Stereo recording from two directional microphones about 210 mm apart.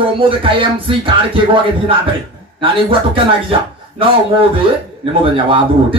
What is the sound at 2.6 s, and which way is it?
Speech, 25° right (ahead or behind).